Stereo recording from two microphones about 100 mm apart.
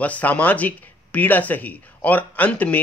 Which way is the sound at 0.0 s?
15° left (ahead or behind).